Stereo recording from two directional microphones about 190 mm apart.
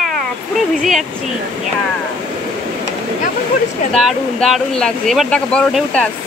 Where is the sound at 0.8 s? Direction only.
Centre (ahead or behind).